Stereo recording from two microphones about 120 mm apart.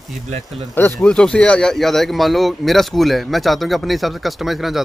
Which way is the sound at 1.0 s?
10° left (ahead or behind).